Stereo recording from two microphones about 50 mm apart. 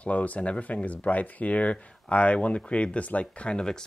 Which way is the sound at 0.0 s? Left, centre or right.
Left.